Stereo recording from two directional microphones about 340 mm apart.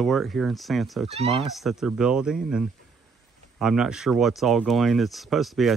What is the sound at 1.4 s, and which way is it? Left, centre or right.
Speech, centre.